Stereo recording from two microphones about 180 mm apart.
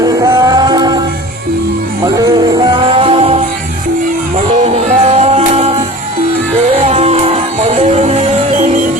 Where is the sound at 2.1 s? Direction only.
20° right (ahead or behind).